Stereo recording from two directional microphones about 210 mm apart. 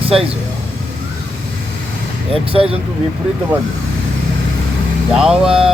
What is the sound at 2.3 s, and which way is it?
Speech, 25° right (ahead or behind).